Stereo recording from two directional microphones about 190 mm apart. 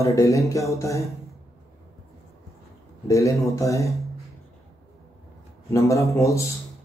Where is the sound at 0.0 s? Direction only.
15° left (ahead or behind).